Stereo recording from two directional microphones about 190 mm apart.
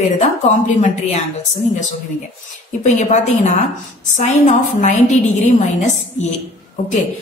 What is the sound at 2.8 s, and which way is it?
A woman's voice, 40° left (ahead or behind).